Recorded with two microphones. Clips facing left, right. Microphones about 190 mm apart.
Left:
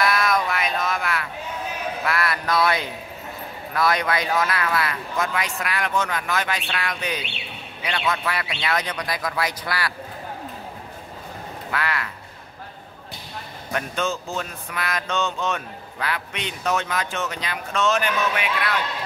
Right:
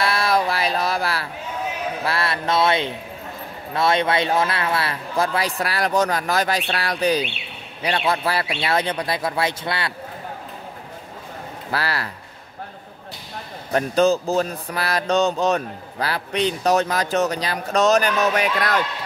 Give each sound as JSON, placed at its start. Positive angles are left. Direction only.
{"t": 0.0, "sound": "a sound", "side_deg": -30}
{"t": 2.0, "sound": "a man's voice", "side_deg": -30}
{"t": 11.7, "sound": "a man's voice", "side_deg": -35}
{"t": 13.7, "sound": "a man's voice", "side_deg": -35}